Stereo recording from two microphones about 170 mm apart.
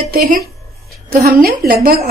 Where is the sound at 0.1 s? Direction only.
65° right (ahead or behind).